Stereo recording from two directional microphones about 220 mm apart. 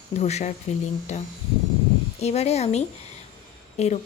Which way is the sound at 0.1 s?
30° left (ahead or behind).